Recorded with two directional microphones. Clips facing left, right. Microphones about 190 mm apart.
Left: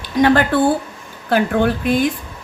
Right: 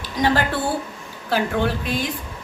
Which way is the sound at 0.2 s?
55° left (ahead or behind).